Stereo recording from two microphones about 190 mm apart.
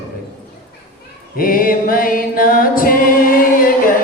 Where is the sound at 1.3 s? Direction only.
50° left (ahead or behind).